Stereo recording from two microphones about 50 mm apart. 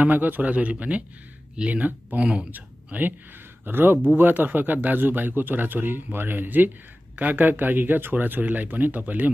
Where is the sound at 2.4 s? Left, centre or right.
Right.